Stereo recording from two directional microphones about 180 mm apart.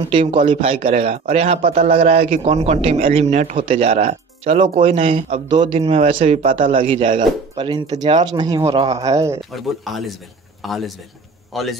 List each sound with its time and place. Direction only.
0.1 s a man's voice: 30° right (ahead or behind)
9.5 s speech: centre (ahead or behind)